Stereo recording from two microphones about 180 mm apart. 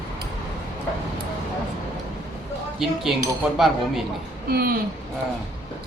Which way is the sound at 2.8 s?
Centre (ahead or behind).